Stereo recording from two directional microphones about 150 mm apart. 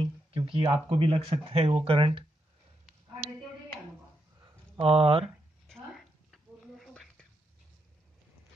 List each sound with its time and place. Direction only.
0.0 s speech: 35° right (ahead or behind)
4.7 s speech: 40° right (ahead or behind)
5.2 s a sound: centre (ahead or behind)